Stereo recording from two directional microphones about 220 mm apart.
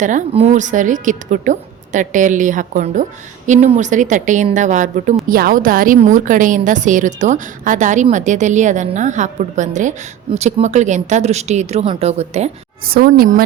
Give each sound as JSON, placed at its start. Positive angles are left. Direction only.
{"t": 0.0, "sound": "a woman's voice", "side_deg": -35}
{"t": 12.8, "sound": "a woman's voice", "side_deg": -45}